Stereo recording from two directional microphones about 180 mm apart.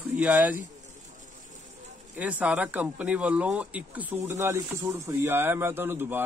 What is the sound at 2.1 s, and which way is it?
A man's voice, 10° right (ahead or behind).